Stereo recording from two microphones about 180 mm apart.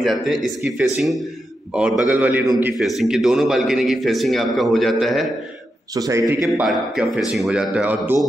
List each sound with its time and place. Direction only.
0.0 s a man's voice: centre (ahead or behind)
5.9 s a man's voice: 20° right (ahead or behind)
6.6 s a man's voice: centre (ahead or behind)